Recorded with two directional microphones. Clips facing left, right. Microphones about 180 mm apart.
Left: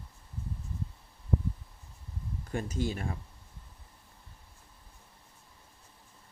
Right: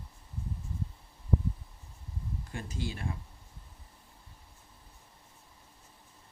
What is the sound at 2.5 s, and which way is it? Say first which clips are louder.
Speech: left 7 dB; 45° left (ahead or behind).